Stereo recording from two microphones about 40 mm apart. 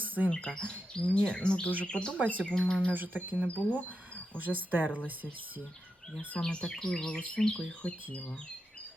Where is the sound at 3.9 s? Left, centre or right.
Right.